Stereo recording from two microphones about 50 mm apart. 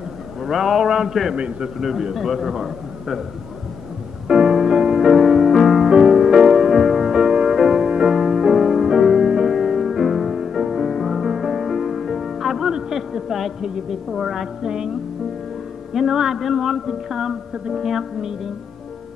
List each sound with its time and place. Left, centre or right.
0.4 s a man's voice: centre
1.3 s a man's voice: right
1.8 s a man's voice: centre
4.3 s music: centre
5.9 s music: centre
12.6 s a woman's voice: centre
15.9 s a man's voice: centre